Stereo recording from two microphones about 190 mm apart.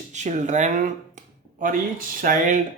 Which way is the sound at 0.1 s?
40° right (ahead or behind).